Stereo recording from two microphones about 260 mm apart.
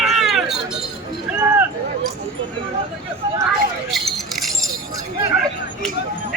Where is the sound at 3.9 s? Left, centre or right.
Centre.